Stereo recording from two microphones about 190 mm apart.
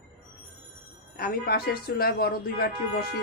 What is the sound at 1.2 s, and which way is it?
A woman's voice, 55° left (ahead or behind).